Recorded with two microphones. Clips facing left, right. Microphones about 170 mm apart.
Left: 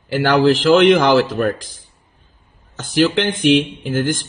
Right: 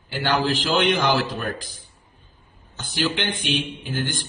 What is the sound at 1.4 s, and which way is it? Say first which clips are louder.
Speech: left 11 dB; 80° left.